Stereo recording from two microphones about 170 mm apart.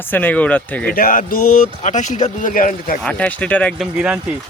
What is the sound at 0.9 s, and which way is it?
A man's voice, 55° left (ahead or behind).